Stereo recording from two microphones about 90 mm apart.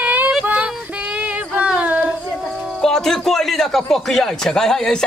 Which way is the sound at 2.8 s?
5° left (ahead or behind).